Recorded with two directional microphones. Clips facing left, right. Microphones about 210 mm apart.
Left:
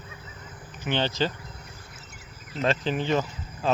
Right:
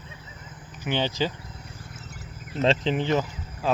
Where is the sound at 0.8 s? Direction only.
10° right (ahead or behind).